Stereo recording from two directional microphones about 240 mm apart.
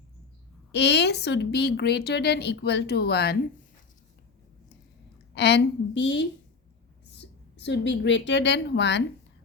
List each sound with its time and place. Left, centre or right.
0.7 s a woman's voice: left
5.3 s a woman's voice: left